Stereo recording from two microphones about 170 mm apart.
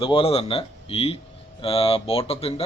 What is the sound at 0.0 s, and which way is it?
Speech, 30° left (ahead or behind).